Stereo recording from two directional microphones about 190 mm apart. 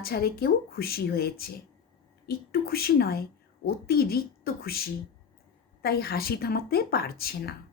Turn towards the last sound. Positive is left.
turn(degrees=55)  # may be behind; listen again after turning